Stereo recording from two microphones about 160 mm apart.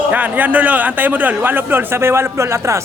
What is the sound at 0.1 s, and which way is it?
A man's voice, 10° right (ahead or behind).